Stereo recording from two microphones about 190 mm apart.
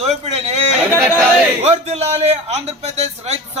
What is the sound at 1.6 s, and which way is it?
A man's voice, 35° right (ahead or behind).